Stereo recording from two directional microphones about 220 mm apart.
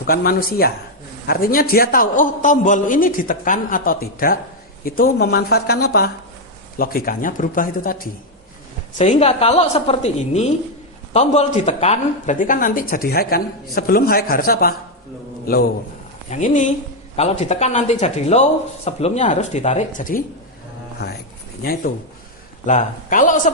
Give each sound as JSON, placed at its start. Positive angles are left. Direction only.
{"t": 0.0, "sound": "a woman's voice", "side_deg": 40}